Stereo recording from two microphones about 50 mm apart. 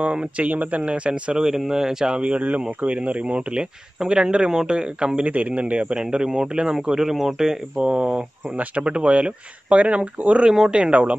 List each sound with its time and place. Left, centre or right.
0.0 s speech: right
1.4 s speech: centre
7.7 s speech: right